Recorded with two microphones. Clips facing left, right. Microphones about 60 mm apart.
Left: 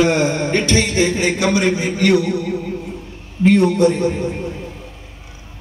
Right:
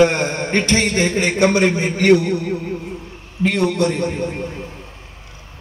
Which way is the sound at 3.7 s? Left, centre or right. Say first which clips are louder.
Left 4 dB; right.